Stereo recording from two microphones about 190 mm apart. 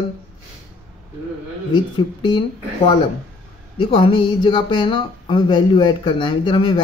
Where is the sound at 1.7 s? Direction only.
25° left (ahead or behind).